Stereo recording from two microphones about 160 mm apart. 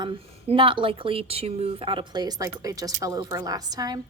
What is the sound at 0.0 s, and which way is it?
Speech, 35° right (ahead or behind).